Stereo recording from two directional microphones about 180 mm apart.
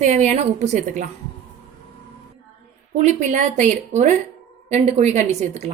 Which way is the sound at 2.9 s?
40° right (ahead or behind).